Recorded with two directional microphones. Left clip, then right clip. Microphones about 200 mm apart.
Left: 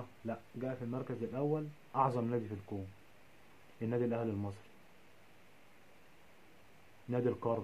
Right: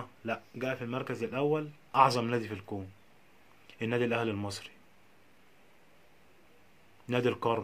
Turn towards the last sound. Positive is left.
turn(degrees=-20)  # may be behind; listen again after turning